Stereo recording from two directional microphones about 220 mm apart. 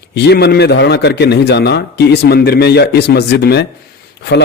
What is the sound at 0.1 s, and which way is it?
A man's voice, 50° left (ahead or behind).